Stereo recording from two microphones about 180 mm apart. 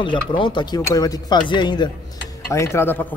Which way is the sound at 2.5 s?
15° left (ahead or behind).